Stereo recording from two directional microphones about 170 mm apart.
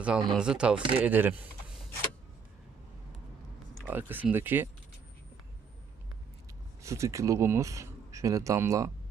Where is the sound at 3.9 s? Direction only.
10° right (ahead or behind).